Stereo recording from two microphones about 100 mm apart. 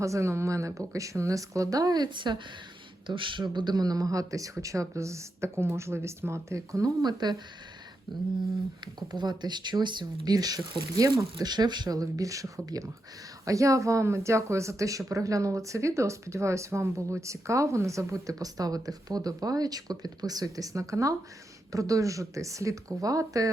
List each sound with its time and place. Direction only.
0.0 s speech: 30° right (ahead or behind)
8.8 s speech: 50° right (ahead or behind)